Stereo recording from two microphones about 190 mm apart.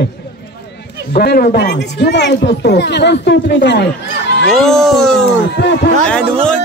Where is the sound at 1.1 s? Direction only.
55° left (ahead or behind).